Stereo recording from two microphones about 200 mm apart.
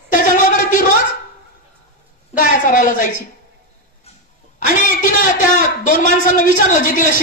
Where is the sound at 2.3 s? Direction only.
40° left (ahead or behind).